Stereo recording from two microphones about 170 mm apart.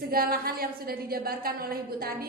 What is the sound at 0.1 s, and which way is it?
A woman's voice, 60° right (ahead or behind).